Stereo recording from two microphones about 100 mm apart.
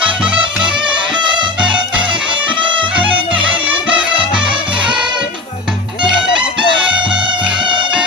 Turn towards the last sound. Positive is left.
turn(degrees=-55)  # may be behind; listen again after turning